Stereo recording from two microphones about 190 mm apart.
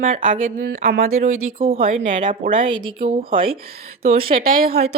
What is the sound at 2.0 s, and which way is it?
Speech, 45° right (ahead or behind).